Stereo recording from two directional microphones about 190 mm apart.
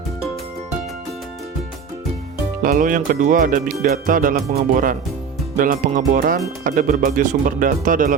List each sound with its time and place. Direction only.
2.6 s speech: 45° right (ahead or behind)